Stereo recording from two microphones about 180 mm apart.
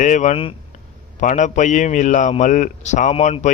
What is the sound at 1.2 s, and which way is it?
A man's voice, 45° left (ahead or behind).